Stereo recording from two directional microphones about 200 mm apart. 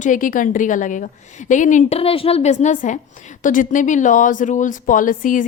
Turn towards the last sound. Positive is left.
turn(degrees=40)  # may be behind; listen again after turning